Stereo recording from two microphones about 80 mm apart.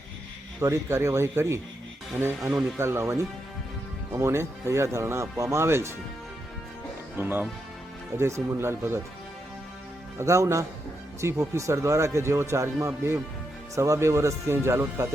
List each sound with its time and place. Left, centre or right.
0.6 s speech: right
7.2 s speech: right
10.2 s speech: right